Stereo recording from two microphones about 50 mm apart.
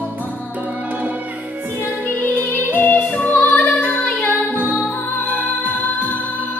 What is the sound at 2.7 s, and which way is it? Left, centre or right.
Music, left.